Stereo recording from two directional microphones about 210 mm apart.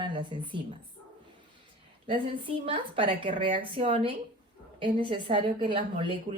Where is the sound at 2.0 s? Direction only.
25° right (ahead or behind).